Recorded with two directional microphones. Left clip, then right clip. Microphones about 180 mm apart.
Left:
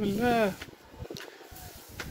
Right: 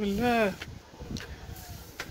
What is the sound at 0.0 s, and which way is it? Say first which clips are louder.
Speech: even; 20° left (ahead or behind).